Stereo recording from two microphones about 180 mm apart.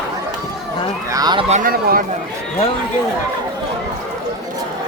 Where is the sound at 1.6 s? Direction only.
55° right (ahead or behind).